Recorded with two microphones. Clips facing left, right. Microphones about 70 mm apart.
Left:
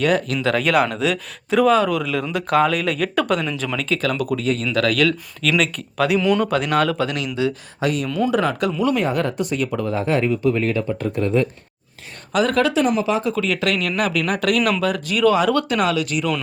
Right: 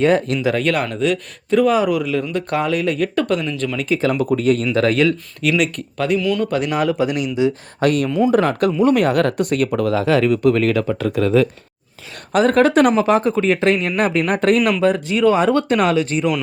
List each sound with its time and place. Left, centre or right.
0.0 s speech: right
0.6 s speech: centre
1.7 s speech: centre
3.8 s speech: centre
4.4 s speech: right
4.7 s speech: right
5.4 s speech: centre
6.1 s speech: left
6.5 s speech: centre
7.8 s speech: right
9.0 s speech: right
12.3 s speech: right
13.3 s speech: right
14.6 s speech: right